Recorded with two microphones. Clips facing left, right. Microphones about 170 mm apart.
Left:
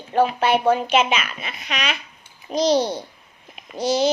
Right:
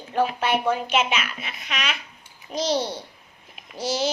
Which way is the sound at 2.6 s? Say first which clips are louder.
Left 6 dB; 40° left (ahead or behind).